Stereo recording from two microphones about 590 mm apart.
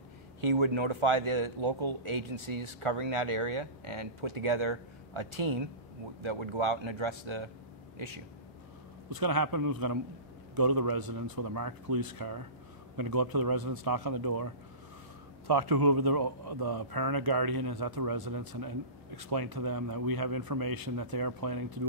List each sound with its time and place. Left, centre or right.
0.4 s speech: right
9.1 s speech: right